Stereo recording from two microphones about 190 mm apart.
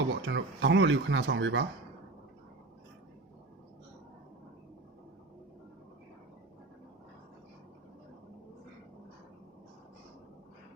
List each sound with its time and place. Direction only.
0.1 s speech: 70° right (ahead or behind)